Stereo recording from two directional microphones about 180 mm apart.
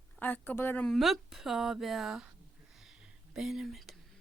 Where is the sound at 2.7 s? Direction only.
5° right (ahead or behind).